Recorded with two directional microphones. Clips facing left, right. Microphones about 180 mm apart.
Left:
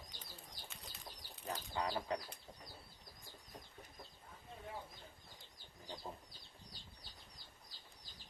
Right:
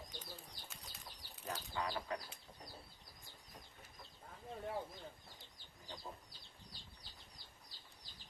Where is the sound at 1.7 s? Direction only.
20° left (ahead or behind).